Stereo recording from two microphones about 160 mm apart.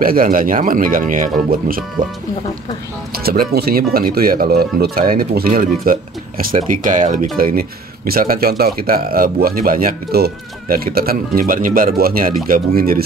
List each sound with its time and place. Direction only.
0.0 s speech: 60° right (ahead or behind)
3.3 s speech: 75° right (ahead or behind); by 7.2 s 55° right (ahead or behind)
7.3 s speech: 65° right (ahead or behind)